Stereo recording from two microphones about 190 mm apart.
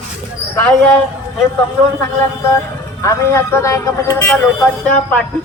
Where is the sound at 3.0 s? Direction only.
15° left (ahead or behind).